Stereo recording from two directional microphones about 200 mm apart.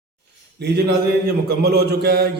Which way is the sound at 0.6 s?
55° right (ahead or behind).